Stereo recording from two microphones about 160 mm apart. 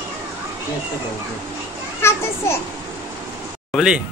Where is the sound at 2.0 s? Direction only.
15° left (ahead or behind).